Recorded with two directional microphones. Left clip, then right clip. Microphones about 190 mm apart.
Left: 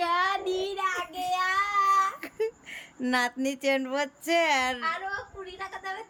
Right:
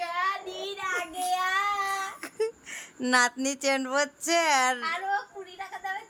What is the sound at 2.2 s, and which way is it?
Speech, 10° left (ahead or behind).